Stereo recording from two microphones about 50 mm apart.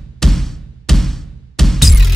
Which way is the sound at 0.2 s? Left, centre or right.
Centre.